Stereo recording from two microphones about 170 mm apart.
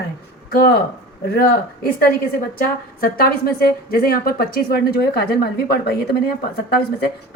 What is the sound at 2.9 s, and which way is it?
A woman's voice, 60° left (ahead or behind).